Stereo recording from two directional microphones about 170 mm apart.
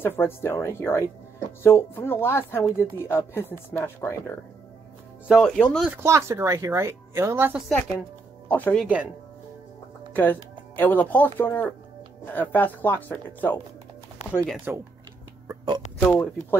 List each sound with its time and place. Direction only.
0.0 s speech: 15° left (ahead or behind)
5.3 s speech: 5° left (ahead or behind)
5.9 s speech: 15° right (ahead or behind)
8.5 s speech: 10° left (ahead or behind)
8.8 s speech: 10° right (ahead or behind)
10.8 s speech: 10° left (ahead or behind)
15.4 s a sound: 25° right (ahead or behind)
16.0 s speech: 10° left (ahead or behind)